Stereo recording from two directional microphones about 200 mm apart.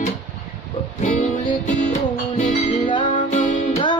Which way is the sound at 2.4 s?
40° left (ahead or behind).